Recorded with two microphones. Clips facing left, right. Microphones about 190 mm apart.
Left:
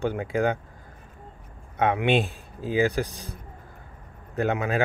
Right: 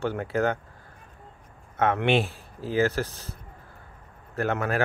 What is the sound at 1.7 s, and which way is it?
Speech, 15° left (ahead or behind).